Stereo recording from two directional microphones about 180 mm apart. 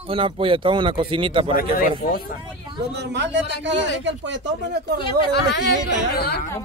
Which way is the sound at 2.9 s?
70° right (ahead or behind).